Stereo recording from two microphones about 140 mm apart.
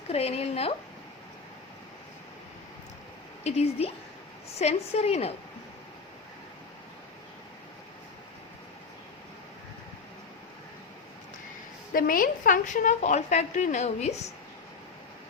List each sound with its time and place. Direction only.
0.1 s a woman's voice: 45° left (ahead or behind)
3.4 s a woman's voice: 50° left (ahead or behind)
11.9 s a woman's voice: 80° left; by 14.3 s 50° left (ahead or behind)